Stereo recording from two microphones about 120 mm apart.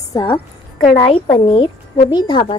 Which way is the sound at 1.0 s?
50° left (ahead or behind).